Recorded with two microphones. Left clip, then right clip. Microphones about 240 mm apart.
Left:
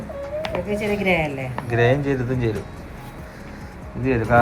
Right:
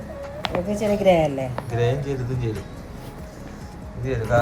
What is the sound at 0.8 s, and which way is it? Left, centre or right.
Speech, right.